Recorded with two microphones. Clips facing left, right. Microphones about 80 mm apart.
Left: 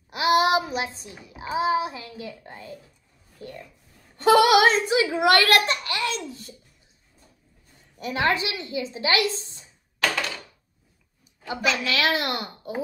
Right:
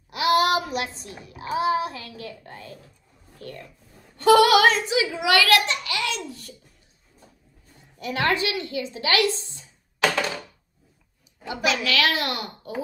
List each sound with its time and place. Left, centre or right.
0.1 s child singing: left
1.0 s a child's voice: left
8.0 s speech: left
11.4 s speech: left